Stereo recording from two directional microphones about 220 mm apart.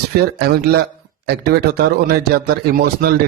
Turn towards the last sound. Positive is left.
turn(degrees=-45)  # may be behind; listen again after turning